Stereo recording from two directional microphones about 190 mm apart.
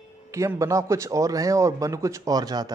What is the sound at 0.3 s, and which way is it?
A man's voice, 15° right (ahead or behind).